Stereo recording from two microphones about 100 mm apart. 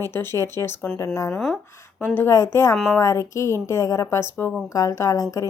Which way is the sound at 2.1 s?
25° left (ahead or behind).